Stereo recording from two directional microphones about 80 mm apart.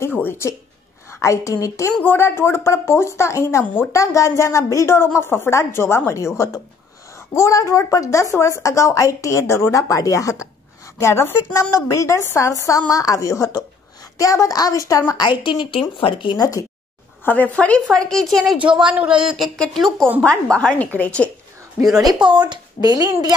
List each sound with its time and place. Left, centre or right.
0.0 s speech: left
1.2 s a woman's voice: left
2.0 s a woman's voice: left
3.6 s speech: centre
3.9 s a woman's voice: left
15.1 s a woman's voice: left
16.3 s a woman's voice: left
17.2 s a woman's voice: left
22.3 s speech: right